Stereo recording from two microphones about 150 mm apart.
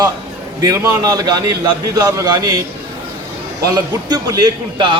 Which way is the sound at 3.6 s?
25° right (ahead or behind).